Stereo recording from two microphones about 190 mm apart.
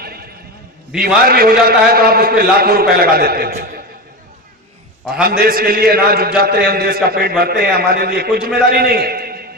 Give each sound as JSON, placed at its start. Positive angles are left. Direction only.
{"t": 0.0, "sound": "neigh", "side_deg": -55}
{"t": 0.9, "sound": "a man's voice", "side_deg": -50}
{"t": 5.3, "sound": "a man's voice", "side_deg": -50}